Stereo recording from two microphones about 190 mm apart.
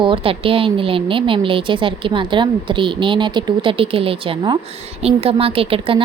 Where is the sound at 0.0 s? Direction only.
30° right (ahead or behind).